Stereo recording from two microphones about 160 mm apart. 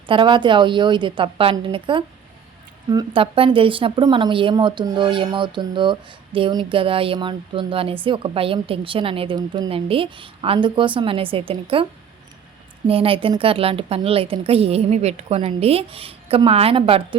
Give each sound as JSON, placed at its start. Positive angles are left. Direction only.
{"t": 0.1, "sound": "a woman's voice", "side_deg": -30}
{"t": 12.9, "sound": "a woman's voice", "side_deg": -35}